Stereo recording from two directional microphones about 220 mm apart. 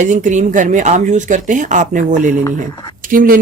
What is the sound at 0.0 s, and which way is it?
Speech, 35° right (ahead or behind).